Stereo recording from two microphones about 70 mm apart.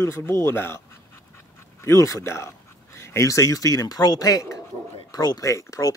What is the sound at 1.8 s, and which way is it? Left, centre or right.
Speech, left.